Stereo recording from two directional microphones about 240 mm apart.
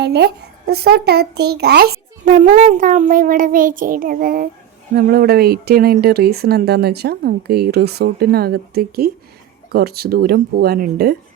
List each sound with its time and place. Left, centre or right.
0.0 s a child's voice: right